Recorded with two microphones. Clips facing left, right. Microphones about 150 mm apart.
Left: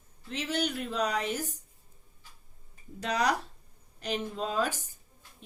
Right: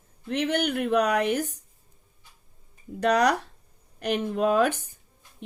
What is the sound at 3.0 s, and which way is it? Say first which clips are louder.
Speech: right 7 dB; 65° right (ahead or behind).